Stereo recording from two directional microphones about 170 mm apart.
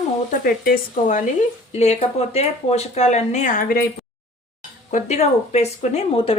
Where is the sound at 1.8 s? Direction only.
40° left (ahead or behind); by 3.8 s 55° left (ahead or behind).